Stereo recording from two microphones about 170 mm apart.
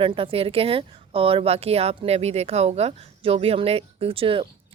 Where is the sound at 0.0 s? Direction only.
30° right (ahead or behind).